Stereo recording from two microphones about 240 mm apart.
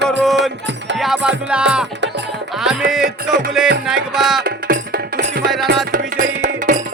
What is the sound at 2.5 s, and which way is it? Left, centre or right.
Music, centre.